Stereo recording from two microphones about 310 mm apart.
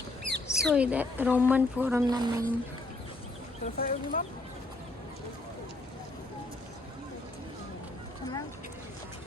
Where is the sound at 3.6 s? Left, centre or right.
Left.